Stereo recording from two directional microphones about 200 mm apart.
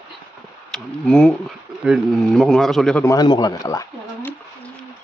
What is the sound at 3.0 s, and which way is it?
Speech, 20° left (ahead or behind).